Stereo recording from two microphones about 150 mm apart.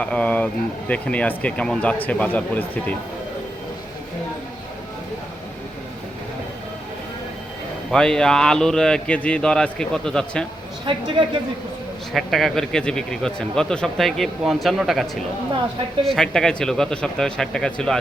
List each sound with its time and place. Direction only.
0.0 s speech: 10° left (ahead or behind)
7.9 s speech: 5° left (ahead or behind)
10.9 s a woman's voice: 35° right (ahead or behind)
12.1 s speech: centre (ahead or behind)